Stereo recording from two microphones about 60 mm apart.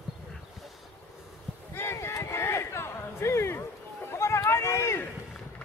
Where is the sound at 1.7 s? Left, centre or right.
Left.